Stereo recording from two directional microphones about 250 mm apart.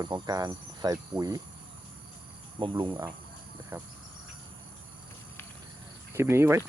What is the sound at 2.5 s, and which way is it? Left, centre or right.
Cricket, centre.